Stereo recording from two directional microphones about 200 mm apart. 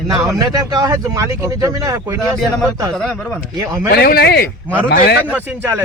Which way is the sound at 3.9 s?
50° left (ahead or behind).